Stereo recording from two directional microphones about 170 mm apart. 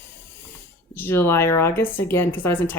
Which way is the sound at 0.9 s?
10° left (ahead or behind).